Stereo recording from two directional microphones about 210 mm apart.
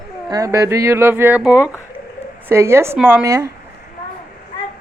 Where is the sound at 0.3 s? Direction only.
15° right (ahead or behind).